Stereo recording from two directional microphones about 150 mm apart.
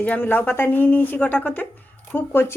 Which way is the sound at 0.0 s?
10° left (ahead or behind).